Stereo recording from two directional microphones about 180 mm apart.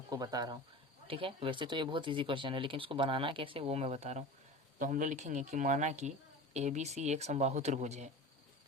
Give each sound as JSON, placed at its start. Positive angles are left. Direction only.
{"t": 0.1, "sound": "speech", "side_deg": -20}